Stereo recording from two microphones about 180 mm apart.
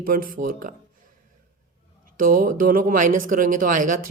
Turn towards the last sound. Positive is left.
turn(degrees=-45)  # may be behind; listen again after turning